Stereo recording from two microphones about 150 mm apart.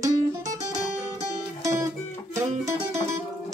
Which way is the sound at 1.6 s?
20° right (ahead or behind).